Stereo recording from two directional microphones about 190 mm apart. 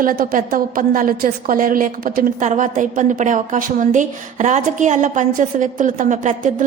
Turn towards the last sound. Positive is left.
turn(degrees=-45)  # may be behind; listen again after turning